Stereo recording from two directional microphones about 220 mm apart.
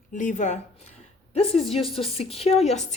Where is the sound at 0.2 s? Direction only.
35° left (ahead or behind).